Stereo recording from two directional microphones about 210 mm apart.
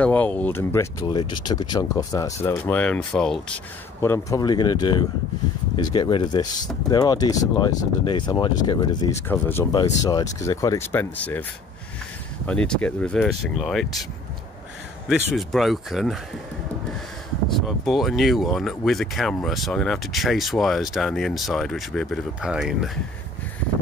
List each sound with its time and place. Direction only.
0.0 s speech: 5° left (ahead or behind)
12.4 s speech: 5° left (ahead or behind)
15.0 s speech: centre (ahead or behind)
17.6 s speech: centre (ahead or behind)